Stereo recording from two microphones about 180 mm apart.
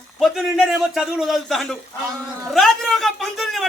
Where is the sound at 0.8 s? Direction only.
Centre (ahead or behind).